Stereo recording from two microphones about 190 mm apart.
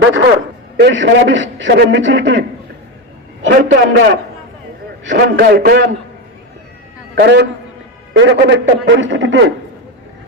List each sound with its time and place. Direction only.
0.0 s a sound: 75° right (ahead or behind)
0.8 s a man's voice: 65° right (ahead or behind)
3.8 s a man's voice: 75° right (ahead or behind)
5.0 s a man's voice: 55° right (ahead or behind)
7.2 s a man's voice: 65° right (ahead or behind)